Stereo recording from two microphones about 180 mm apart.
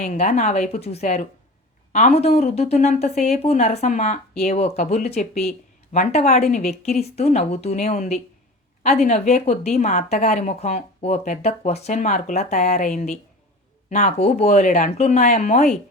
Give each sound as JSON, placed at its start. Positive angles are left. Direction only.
{"t": 0.0, "sound": "a woman's voice", "side_deg": 40}